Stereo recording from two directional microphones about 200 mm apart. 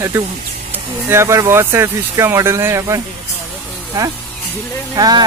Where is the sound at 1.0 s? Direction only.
15° right (ahead or behind).